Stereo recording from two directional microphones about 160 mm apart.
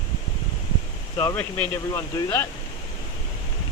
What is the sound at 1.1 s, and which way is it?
Speech, 15° left (ahead or behind).